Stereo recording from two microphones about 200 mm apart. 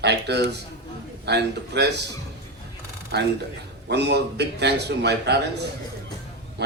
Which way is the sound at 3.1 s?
55° right (ahead or behind).